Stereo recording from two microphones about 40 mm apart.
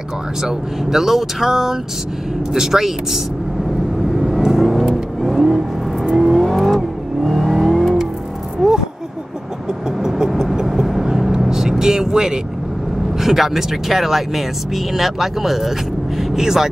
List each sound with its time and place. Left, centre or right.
0.4 s speech: centre
4.1 s vehicle: centre
7.6 s car: centre
8.6 s a sound: centre
10.0 s vehicle: centre
13.2 s speech: centre
16.2 s vehicle: centre